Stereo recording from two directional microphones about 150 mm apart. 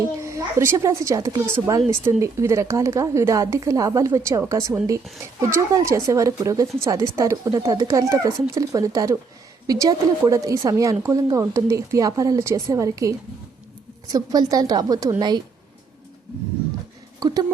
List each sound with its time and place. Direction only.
0.2 s a woman's voice: 20° right (ahead or behind)
17.2 s speech: 25° right (ahead or behind)